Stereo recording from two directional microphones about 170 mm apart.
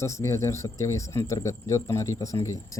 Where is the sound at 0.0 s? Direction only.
15° left (ahead or behind).